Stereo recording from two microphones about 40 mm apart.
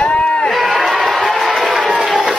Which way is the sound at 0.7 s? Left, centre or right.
Centre.